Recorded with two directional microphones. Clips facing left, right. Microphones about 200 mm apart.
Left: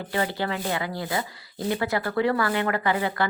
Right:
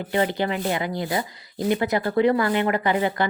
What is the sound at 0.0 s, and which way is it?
Speech, 20° right (ahead or behind).